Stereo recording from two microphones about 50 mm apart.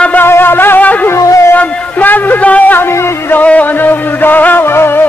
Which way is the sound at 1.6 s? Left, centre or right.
Left.